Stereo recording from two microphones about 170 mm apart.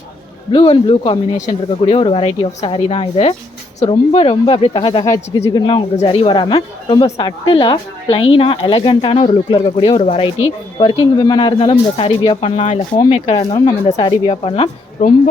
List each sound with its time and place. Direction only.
0.5 s speech: 30° left (ahead or behind)
13.4 s speech: 25° left (ahead or behind)
15.0 s speech: 45° left (ahead or behind)